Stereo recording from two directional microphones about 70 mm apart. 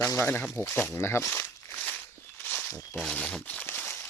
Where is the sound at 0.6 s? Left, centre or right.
Left.